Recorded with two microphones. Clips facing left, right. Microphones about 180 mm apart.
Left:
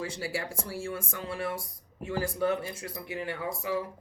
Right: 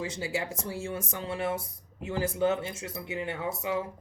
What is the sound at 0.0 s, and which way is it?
Speech, 20° right (ahead or behind).